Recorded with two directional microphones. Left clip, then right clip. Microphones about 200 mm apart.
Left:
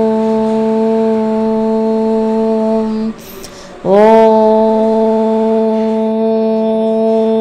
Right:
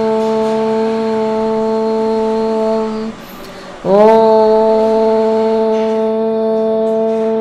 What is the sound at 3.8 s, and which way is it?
Mantra, 30° left (ahead or behind).